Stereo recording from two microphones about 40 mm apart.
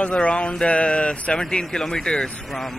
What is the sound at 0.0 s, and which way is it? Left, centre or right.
Speech, left.